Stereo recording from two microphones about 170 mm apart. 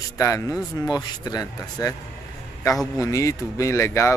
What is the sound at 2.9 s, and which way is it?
Speech, 20° left (ahead or behind).